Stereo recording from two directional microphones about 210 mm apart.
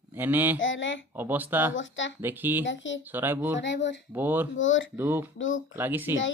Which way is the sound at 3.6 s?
55° left (ahead or behind).